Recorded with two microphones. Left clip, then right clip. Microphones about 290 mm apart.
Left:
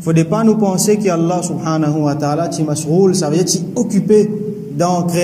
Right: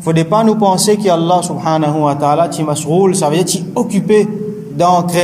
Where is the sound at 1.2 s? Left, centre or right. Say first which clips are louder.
Right 6 dB; right.